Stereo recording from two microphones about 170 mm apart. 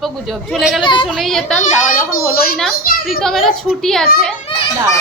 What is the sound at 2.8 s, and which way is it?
Children playing, 60° left (ahead or behind).